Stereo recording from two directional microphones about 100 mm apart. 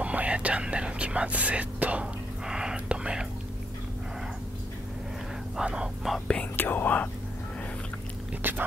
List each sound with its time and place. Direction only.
0.0 s whispering: 15° right (ahead or behind)
5.6 s a sound: 10° right (ahead or behind)
6.1 s whispering: 10° left (ahead or behind)
8.4 s whispering: 20° right (ahead or behind)